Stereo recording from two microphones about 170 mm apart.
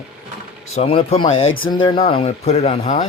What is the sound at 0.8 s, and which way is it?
Speech, 35° left (ahead or behind).